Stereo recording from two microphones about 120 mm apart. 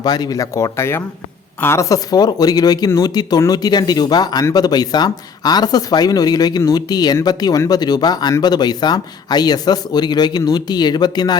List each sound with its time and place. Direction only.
0.0 s speech: 35° left (ahead or behind)